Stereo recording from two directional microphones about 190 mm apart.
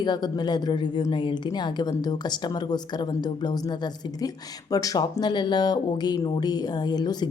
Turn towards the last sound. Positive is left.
turn(degrees=20)  # may be behind; listen again after turning